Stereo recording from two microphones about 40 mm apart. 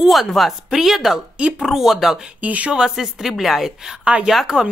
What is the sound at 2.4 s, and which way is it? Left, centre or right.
Speech, right.